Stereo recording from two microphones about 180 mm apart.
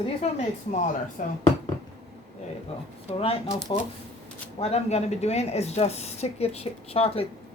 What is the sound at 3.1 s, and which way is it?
Speech, 35° left (ahead or behind).